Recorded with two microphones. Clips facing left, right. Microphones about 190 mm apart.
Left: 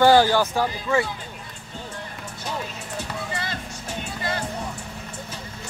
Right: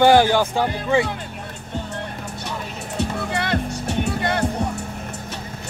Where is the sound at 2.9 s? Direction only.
65° right (ahead or behind).